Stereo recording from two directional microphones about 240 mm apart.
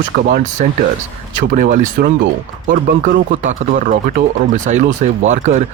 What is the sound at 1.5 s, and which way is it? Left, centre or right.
Speech, right.